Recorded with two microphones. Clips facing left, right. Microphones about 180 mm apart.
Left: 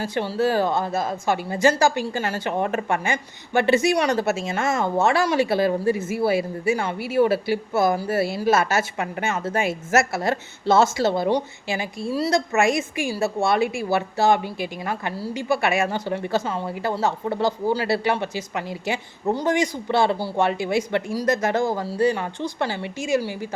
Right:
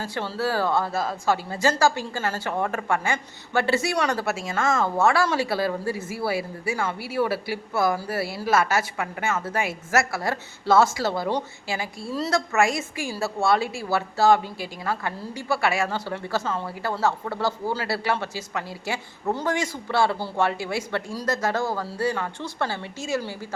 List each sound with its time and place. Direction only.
0.0 s a woman's voice: 15° left (ahead or behind)